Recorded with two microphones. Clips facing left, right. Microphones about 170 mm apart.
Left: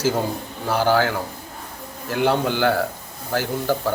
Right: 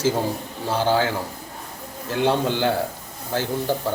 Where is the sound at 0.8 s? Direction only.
20° right (ahead or behind).